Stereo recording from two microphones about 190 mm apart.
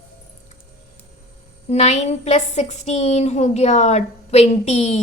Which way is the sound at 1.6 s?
35° left (ahead or behind).